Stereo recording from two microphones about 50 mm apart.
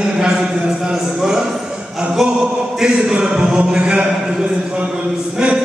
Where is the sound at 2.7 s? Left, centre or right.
Centre.